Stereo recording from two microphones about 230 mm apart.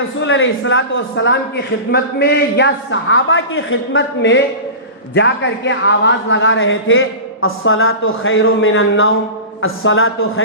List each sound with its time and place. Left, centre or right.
0.2 s a man's voice: left